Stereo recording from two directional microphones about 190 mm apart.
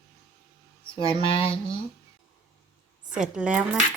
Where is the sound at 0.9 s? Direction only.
30° left (ahead or behind).